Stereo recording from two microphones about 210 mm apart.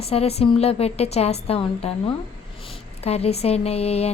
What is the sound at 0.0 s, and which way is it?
A woman's voice, 30° left (ahead or behind).